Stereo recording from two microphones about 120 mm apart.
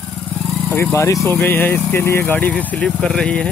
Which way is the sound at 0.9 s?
25° left (ahead or behind).